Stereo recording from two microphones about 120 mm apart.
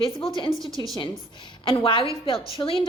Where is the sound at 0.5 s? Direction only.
30° right (ahead or behind).